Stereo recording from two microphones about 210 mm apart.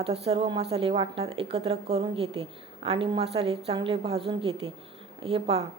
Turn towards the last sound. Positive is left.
turn(degrees=-30)  # may be behind; listen again after turning